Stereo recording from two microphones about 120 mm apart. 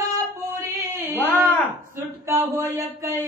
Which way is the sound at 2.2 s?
20° right (ahead or behind).